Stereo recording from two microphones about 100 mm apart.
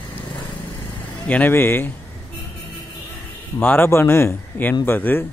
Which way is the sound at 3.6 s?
20° left (ahead or behind).